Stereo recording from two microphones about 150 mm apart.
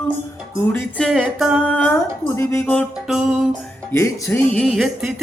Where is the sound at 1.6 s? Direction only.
10° left (ahead or behind).